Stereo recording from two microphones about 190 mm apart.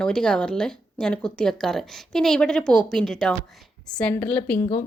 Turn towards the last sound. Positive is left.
turn(degrees=5)  # may be behind; listen again after turning